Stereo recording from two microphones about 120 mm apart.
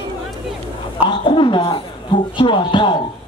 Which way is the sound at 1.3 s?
40° left (ahead or behind).